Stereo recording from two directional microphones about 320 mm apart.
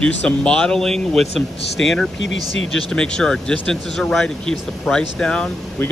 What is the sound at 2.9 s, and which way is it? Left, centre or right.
Speech, centre.